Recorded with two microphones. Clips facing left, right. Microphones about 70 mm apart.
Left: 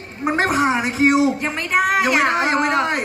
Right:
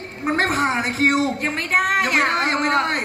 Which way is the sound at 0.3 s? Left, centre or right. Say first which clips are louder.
Left 2 dB; centre.